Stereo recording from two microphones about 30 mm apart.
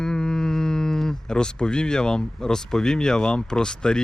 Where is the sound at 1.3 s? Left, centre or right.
Left.